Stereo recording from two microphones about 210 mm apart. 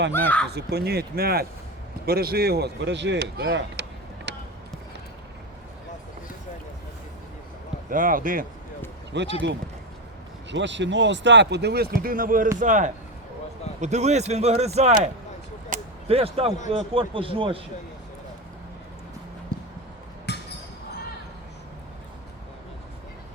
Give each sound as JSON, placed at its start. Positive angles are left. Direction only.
{"t": 0.1, "sound": "speech", "side_deg": 10}
{"t": 0.4, "sound": "speech", "side_deg": -50}
{"t": 4.3, "sound": "basketball bounce", "side_deg": -55}
{"t": 7.9, "sound": "speech", "side_deg": -40}
{"t": 9.1, "sound": "speech", "side_deg": -55}
{"t": 10.5, "sound": "speech", "side_deg": -60}
{"t": 15.7, "sound": "a sound", "side_deg": -30}
{"t": 16.7, "sound": "speech", "side_deg": -25}
{"t": 20.3, "sound": "a sound", "side_deg": 50}